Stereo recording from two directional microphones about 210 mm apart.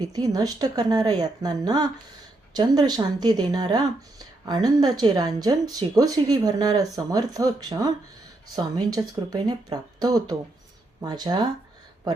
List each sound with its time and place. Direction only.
0.0 s speech: 20° right (ahead or behind)